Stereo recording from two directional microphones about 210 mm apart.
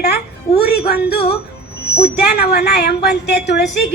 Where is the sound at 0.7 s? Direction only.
50° left (ahead or behind).